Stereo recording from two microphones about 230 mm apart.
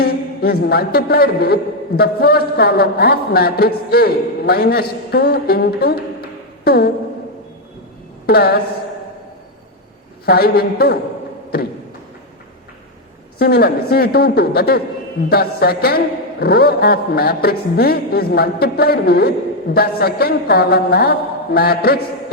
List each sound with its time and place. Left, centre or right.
0.0 s a man's voice: left
8.3 s a man's voice: left
10.2 s a man's voice: left
13.4 s a man's voice: left